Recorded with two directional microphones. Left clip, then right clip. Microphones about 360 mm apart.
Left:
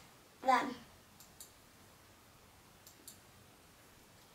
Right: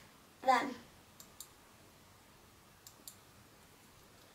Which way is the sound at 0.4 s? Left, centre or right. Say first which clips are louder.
Right 1 dB; centre.